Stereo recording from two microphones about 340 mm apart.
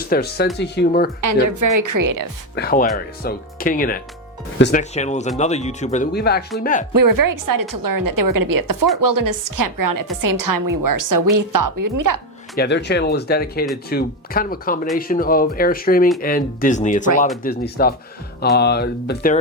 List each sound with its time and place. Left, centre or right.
0.0 s speech: left
1.2 s a woman's voice: right
2.6 s speech: left
6.9 s a woman's voice: right
12.5 s speech: left